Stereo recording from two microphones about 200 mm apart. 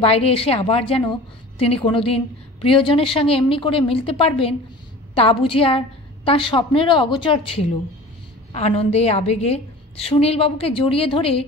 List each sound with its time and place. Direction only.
0.0 s a woman's voice: 30° left (ahead or behind)